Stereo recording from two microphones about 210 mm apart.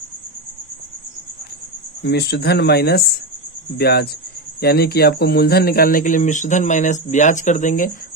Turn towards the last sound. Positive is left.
turn(degrees=40)  # may be behind; listen again after turning